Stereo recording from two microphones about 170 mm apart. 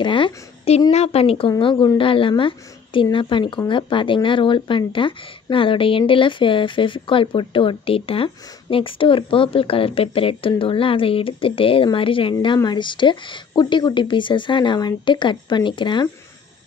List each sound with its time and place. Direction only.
0.0 s a woman's voice: 30° left (ahead or behind)